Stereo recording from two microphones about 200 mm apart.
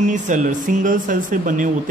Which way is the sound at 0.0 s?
40° right (ahead or behind).